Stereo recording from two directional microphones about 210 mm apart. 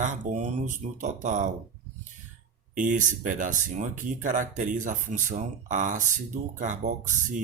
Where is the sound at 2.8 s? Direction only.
40° right (ahead or behind).